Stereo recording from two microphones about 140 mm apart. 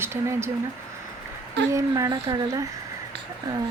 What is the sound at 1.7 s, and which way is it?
Speech, 25° right (ahead or behind).